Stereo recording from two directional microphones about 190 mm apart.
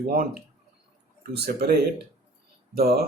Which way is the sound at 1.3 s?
55° right (ahead or behind).